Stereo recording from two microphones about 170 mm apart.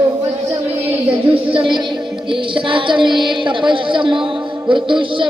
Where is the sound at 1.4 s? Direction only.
30° right (ahead or behind).